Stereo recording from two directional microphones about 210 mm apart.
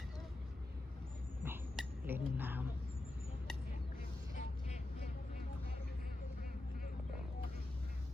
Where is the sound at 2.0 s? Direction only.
10° right (ahead or behind).